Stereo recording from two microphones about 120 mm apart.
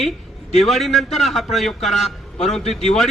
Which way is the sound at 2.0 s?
65° left (ahead or behind).